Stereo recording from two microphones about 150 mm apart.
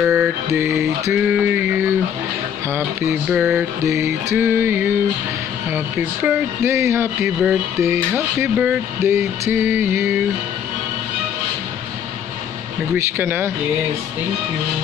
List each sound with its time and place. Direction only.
0.0 s mantra: 5° right (ahead or behind)
0.5 s speech: 20° right (ahead or behind)
3.3 s a sound: 5° right (ahead or behind)
3.8 s speech: 20° right (ahead or behind)
6.2 s speech: 20° right (ahead or behind)
12.9 s speech: 15° right (ahead or behind)